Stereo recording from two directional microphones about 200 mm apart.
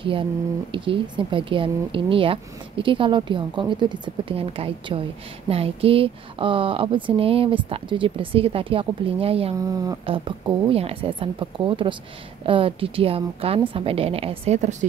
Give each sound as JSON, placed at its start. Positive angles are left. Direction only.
{"t": 0.0, "sound": "speech", "side_deg": -25}
{"t": 9.6, "sound": "speech", "side_deg": -15}